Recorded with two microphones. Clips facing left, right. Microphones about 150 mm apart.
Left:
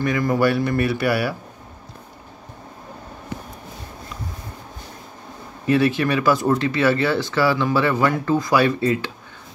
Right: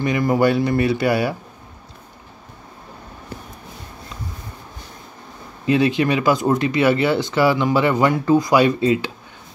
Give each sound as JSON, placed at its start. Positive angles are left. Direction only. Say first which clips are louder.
{"t": 0.0, "sound": "speech", "louder": "right 2 dB", "side_deg": -15}
{"t": 5.7, "sound": "speech", "louder": "right 1 dB", "side_deg": -20}